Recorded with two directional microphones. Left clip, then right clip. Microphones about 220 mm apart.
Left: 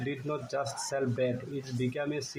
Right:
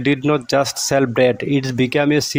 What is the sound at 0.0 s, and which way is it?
Speech, 45° right (ahead or behind).